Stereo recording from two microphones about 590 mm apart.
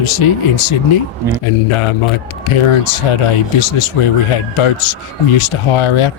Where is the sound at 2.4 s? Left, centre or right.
Left.